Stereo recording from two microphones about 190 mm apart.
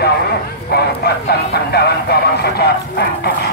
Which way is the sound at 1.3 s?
55° left (ahead or behind).